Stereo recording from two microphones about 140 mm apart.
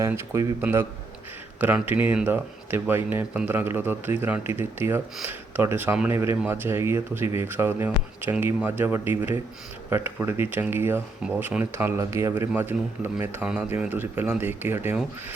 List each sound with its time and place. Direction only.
0.1 s speech: 15° right (ahead or behind)